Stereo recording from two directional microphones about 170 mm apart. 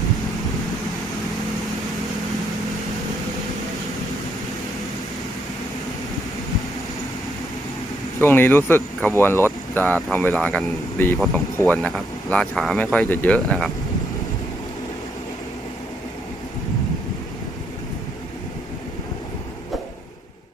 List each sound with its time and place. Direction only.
8.2 s speech: 10° left (ahead or behind)